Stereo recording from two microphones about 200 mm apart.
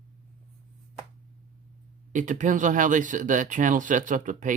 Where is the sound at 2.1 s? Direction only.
40° right (ahead or behind).